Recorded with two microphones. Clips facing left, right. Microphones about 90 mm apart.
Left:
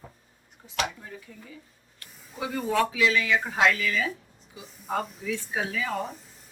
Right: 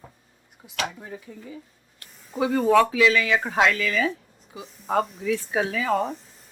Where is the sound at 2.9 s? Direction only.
70° right (ahead or behind).